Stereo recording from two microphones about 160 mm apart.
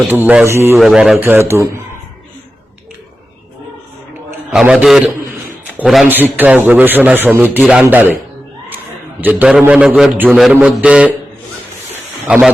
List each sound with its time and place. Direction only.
0.1 s a man's voice: 10° right (ahead or behind)
0.8 s a man's voice: centre (ahead or behind)
1.2 s a man's voice: 15° right (ahead or behind)
4.5 s a man's voice: 5° right (ahead or behind)
9.2 s a man's voice: 10° right (ahead or behind)
11.9 s a sound: 5° right (ahead or behind)